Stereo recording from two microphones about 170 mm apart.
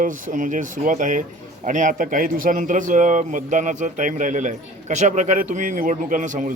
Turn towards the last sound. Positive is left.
turn(degrees=-50)  # may be behind; listen again after turning